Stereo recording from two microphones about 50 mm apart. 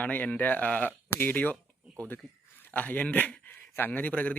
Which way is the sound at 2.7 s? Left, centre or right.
Left.